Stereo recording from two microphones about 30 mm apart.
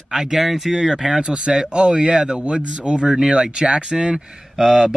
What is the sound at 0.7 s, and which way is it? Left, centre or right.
Speech, right.